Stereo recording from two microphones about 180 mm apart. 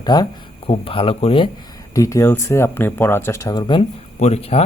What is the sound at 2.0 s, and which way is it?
Speech, 15° left (ahead or behind).